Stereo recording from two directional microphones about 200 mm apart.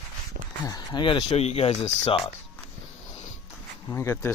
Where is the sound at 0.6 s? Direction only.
20° left (ahead or behind).